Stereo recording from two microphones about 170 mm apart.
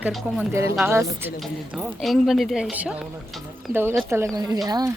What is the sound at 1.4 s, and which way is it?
A woman's voice, centre (ahead or behind).